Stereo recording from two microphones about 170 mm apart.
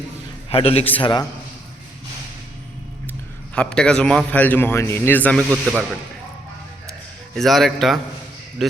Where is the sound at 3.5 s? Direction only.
5° left (ahead or behind).